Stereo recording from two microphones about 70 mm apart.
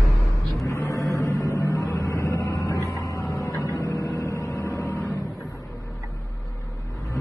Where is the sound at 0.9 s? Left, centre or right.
Left.